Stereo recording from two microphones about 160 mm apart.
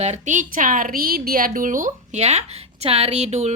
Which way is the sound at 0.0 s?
50° right (ahead or behind).